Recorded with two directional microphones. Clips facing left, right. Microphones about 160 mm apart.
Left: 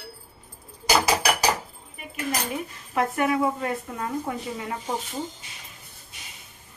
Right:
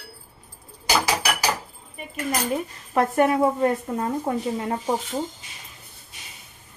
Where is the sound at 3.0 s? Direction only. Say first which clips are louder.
Right 4 dB; 35° right (ahead or behind).